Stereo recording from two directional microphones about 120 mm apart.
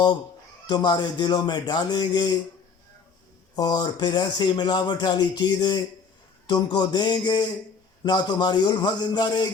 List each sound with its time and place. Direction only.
0.7 s speech: 35° left (ahead or behind)
3.5 s speech: 35° left (ahead or behind)